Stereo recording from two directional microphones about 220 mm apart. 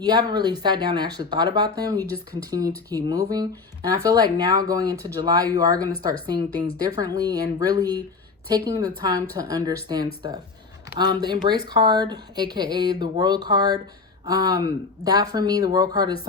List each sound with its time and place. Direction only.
0.0 s speech: 15° right (ahead or behind)